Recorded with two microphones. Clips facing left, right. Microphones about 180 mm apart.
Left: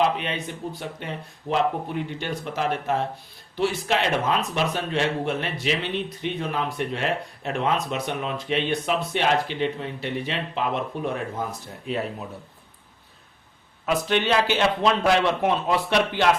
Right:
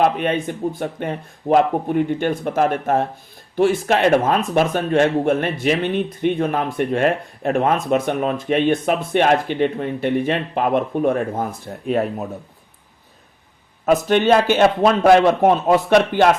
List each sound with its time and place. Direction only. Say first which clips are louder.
0.0 s speech: right 6 dB; 50° right (ahead or behind)
13.8 s speech: right 7 dB; 45° right (ahead or behind)